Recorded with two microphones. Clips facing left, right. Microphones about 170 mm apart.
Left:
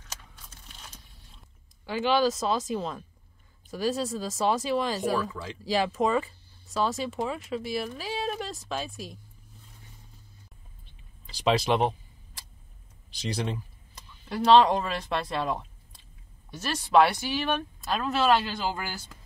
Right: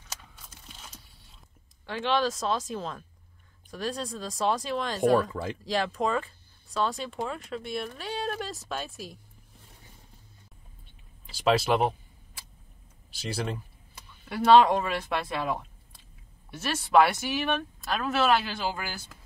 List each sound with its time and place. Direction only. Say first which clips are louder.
1.9 s speech: left 3 dB; 5° left (ahead or behind)
5.1 s speech: right 5 dB; 55° right (ahead or behind)
5.6 s speech: left 4 dB; 5° left (ahead or behind)
10.9 s a sound: left 1 dB; centre (ahead or behind)
13.1 s speech: left 1 dB; 5° right (ahead or behind)